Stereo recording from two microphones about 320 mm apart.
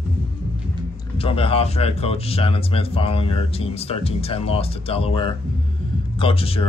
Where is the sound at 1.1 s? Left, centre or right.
Centre.